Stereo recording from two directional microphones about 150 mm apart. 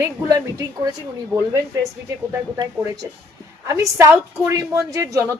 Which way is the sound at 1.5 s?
20° right (ahead or behind).